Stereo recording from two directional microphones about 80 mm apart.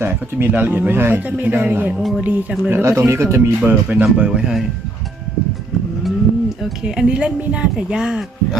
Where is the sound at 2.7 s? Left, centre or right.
Right.